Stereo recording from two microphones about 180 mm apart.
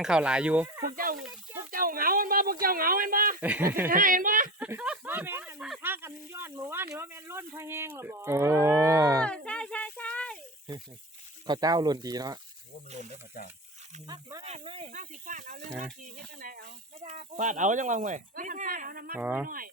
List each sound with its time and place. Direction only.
0.0 s speech: 5° right (ahead or behind)
0.9 s speech: 50° right (ahead or behind)
3.4 s speech: 10° right (ahead or behind)
3.8 s speech: 50° right (ahead or behind)
4.6 s a sound: 5° right (ahead or behind)
5.9 s speech: 15° right (ahead or behind)
9.2 s a sound: 5° left (ahead or behind)
11.4 s speech: 20° right (ahead or behind)
14.1 s speech: 20° right (ahead or behind)
14.4 s speech: 35° right (ahead or behind)
14.8 s speech: 45° right (ahead or behind)
19.1 s speech: 5° right (ahead or behind)
19.5 s speech: 50° right (ahead or behind)